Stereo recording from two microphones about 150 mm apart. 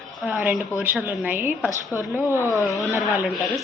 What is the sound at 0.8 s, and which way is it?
A woman's voice, 5° right (ahead or behind).